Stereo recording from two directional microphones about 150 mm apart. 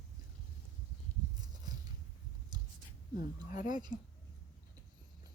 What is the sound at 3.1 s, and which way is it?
Speech, 60° left (ahead or behind).